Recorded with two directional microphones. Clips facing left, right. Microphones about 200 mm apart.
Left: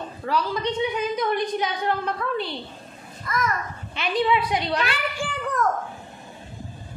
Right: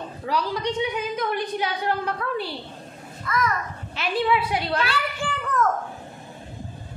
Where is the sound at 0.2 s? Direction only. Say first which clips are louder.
Left 1 dB; 15° right (ahead or behind).